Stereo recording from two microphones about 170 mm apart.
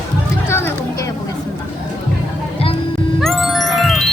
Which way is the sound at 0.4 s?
15° left (ahead or behind).